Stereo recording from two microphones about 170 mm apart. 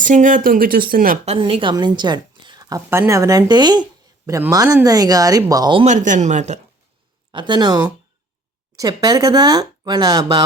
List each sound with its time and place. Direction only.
0.0 s speech: 50° right (ahead or behind)
1.2 s a woman's voice: 35° right (ahead or behind)
5.8 s speech: 45° right (ahead or behind)
7.3 s a woman's voice: 25° right (ahead or behind)